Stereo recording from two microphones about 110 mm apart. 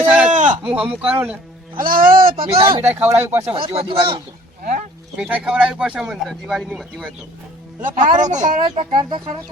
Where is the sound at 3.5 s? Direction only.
55° right (ahead or behind).